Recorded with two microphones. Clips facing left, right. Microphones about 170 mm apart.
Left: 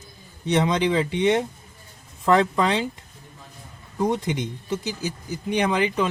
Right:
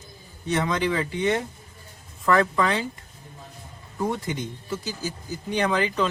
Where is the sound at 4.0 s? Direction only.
20° left (ahead or behind).